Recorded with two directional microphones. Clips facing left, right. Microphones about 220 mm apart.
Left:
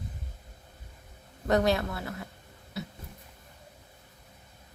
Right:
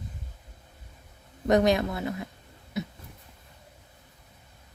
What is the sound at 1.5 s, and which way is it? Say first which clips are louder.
Speech: right 3 dB; 20° right (ahead or behind).